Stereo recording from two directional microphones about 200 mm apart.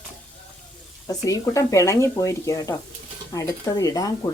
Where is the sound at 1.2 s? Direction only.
15° left (ahead or behind).